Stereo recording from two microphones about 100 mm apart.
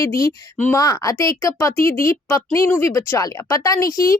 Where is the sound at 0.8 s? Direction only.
35° left (ahead or behind).